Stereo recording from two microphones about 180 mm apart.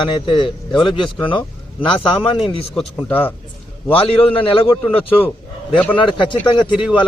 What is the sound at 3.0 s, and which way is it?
Speech, 10° left (ahead or behind).